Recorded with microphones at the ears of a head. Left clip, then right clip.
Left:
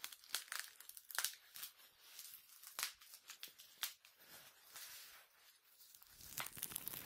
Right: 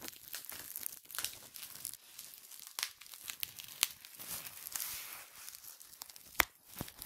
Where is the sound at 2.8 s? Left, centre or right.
Right.